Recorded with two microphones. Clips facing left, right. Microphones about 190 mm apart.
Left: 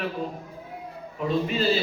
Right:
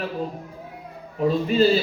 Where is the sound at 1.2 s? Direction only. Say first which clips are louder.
Right 6 dB; 40° right (ahead or behind).